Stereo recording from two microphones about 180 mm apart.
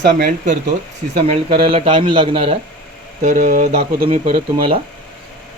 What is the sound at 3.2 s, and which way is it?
Speech, 45° right (ahead or behind).